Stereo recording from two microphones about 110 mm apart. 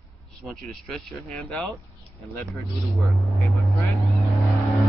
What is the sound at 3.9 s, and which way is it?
Vehicle, centre (ahead or behind).